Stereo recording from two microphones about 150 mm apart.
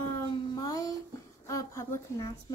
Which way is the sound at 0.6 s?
25° left (ahead or behind).